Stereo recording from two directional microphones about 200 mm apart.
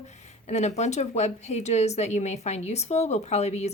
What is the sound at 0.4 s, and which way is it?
A woman's voice, 35° left (ahead or behind).